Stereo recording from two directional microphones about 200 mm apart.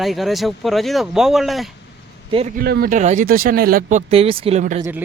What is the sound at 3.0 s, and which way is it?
Speech, 40° right (ahead or behind).